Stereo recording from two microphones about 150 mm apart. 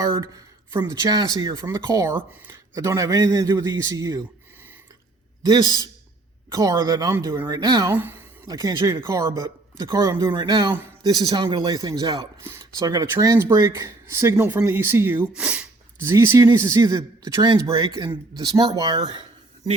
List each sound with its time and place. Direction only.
0.0 s speech: 20° right (ahead or behind)
5.4 s speech: 25° right (ahead or behind)
7.9 s a woman's voice: 15° right (ahead or behind)
8.4 s speech: 25° right (ahead or behind)